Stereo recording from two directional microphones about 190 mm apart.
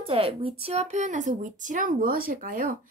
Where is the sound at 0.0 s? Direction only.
30° right (ahead or behind).